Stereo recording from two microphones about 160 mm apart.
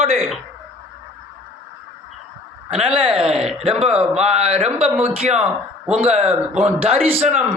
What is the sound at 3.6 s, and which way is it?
Speech, 40° right (ahead or behind).